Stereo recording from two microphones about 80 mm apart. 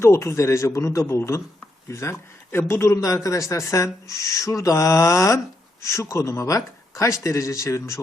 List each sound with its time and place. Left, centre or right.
0.0 s speech: left